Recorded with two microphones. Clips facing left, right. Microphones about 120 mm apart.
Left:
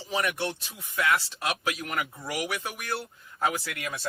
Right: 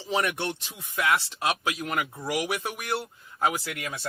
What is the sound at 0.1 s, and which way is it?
Speech, 20° right (ahead or behind).